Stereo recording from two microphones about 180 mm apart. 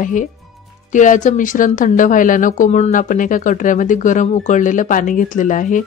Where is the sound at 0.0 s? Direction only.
45° left (ahead or behind).